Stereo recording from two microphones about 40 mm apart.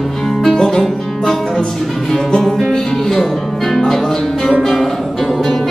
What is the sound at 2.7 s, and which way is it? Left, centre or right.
Speech, centre.